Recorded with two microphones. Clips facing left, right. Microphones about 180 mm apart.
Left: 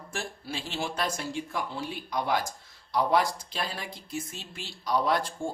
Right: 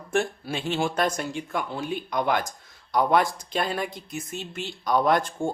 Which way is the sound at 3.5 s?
55° right (ahead or behind).